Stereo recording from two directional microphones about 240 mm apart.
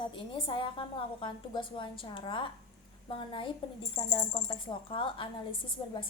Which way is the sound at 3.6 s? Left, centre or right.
Left.